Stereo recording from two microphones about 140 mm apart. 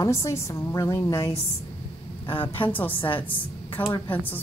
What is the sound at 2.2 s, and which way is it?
A woman's voice, 35° left (ahead or behind).